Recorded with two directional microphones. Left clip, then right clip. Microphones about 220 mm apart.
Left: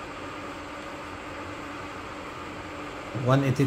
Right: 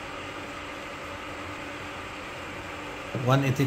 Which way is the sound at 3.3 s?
5° left (ahead or behind).